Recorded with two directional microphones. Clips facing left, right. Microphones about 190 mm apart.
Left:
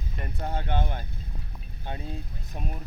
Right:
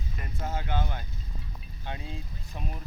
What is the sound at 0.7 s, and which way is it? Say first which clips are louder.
Speech: left 2 dB; 55° left (ahead or behind).